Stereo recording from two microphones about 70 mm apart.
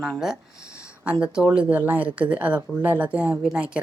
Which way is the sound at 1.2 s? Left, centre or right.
Centre.